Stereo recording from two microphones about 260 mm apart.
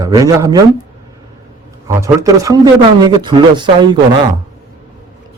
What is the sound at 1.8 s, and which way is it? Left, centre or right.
Speech, centre.